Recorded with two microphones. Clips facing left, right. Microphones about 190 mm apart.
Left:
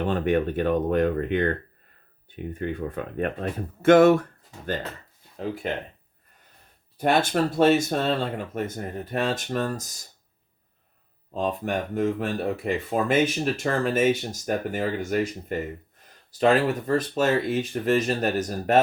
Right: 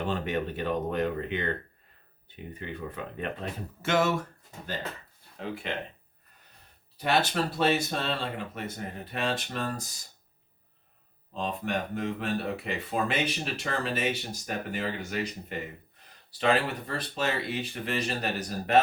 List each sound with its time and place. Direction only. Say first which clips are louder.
0.0 s speech: left 7 dB; 55° left (ahead or behind)
5.6 s speech: left 5 dB; 40° left (ahead or behind)
6.9 s speech: left 5 dB; 50° left (ahead or behind)
11.3 s speech: left 5 dB; 45° left (ahead or behind)